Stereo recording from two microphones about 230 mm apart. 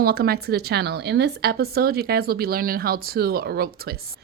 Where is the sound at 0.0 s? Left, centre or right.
Right.